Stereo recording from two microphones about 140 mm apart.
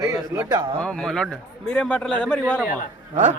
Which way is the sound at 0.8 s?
5° left (ahead or behind).